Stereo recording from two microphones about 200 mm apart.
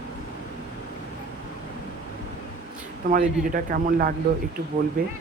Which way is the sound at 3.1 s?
45° right (ahead or behind).